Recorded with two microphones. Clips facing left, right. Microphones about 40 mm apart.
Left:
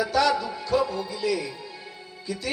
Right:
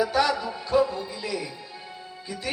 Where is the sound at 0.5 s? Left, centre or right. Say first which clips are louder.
Right 1 dB; right.